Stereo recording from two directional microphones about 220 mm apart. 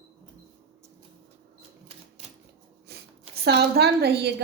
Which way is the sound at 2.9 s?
45° right (ahead or behind).